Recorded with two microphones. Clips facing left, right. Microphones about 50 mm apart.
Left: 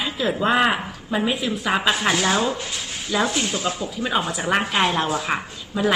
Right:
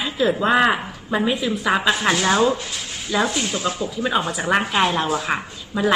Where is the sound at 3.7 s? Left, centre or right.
Centre.